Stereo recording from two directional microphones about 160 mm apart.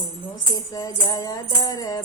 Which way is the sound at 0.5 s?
20° left (ahead or behind).